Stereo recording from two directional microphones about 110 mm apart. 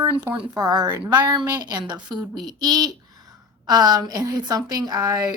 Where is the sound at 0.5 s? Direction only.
35° right (ahead or behind).